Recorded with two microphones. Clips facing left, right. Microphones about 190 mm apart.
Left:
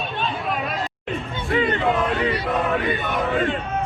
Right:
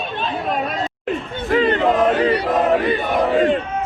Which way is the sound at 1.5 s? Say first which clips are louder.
Right 5 dB; 40° right (ahead or behind).